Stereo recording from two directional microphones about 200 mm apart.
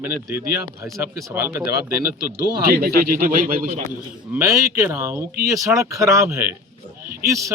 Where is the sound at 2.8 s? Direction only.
45° right (ahead or behind).